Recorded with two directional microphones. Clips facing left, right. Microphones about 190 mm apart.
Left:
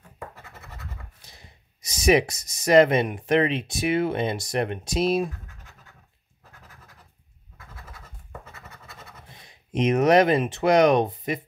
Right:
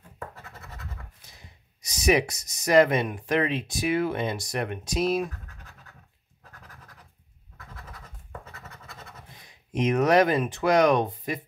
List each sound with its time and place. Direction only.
1.9 s speech: 25° left (ahead or behind)
9.7 s speech: 25° left (ahead or behind)